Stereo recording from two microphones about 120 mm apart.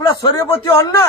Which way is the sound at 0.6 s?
25° left (ahead or behind).